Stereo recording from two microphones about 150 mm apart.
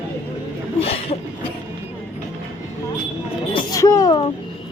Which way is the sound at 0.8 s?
40° left (ahead or behind).